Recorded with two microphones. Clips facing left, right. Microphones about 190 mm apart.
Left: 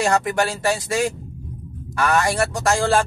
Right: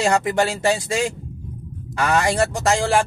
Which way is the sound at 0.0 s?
20° right (ahead or behind).